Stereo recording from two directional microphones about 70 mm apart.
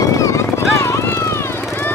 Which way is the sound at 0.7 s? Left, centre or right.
Left.